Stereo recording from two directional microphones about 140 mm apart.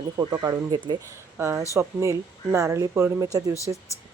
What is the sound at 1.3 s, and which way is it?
Speech, 15° right (ahead or behind).